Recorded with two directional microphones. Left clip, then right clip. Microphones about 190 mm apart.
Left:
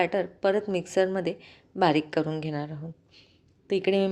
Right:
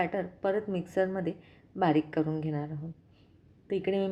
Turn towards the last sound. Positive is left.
turn(degrees=30)  # may be behind; listen again after turning